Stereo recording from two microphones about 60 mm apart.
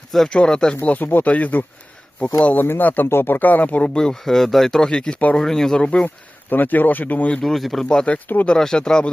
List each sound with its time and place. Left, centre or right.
0.3 s speech: centre
0.8 s speech: left; by 6.1 s centre
6.5 s speech: left
7.4 s speech: centre
7.9 s speech: centre